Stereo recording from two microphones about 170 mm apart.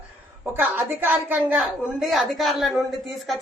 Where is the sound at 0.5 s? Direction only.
10° right (ahead or behind).